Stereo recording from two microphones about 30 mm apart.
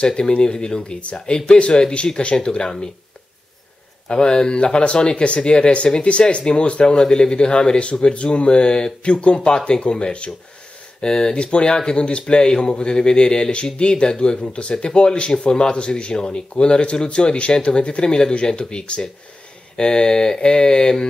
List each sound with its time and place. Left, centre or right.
0.0 s mantra: left
0.4 s speech: left
1.7 s mantra: left
4.1 s speech: left
6.2 s mantra: left
6.6 s speech: left
7.0 s mantra: left
7.8 s speech: left
11.0 s mantra: left
11.3 s speech: left
12.0 s speech: left
19.8 s mantra: left